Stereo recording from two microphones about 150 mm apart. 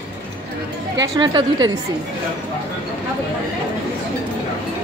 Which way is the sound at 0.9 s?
25° right (ahead or behind).